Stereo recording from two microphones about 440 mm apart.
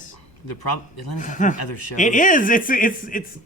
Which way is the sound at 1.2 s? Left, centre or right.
Centre.